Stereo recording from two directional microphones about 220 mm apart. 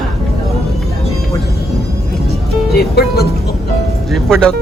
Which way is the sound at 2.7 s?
45° left (ahead or behind).